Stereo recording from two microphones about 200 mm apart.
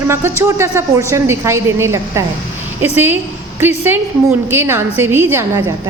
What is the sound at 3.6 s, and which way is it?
A woman's voice, 10° right (ahead or behind).